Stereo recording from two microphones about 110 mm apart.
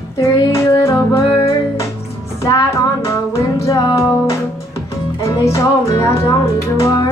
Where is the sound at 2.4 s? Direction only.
30° left (ahead or behind).